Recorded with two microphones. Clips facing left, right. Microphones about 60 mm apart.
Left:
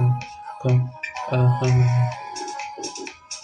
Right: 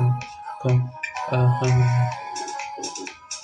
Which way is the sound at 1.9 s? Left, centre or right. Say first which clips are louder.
Even; centre.